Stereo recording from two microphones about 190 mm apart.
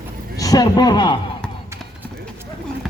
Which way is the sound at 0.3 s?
20° left (ahead or behind).